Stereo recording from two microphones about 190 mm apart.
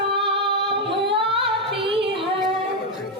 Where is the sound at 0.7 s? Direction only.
30° right (ahead or behind).